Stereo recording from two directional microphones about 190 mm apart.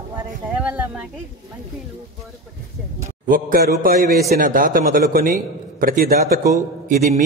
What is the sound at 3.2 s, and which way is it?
A man's voice, 50° right (ahead or behind).